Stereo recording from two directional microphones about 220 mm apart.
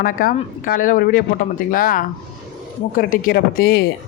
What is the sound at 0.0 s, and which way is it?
Speech, 40° left (ahead or behind).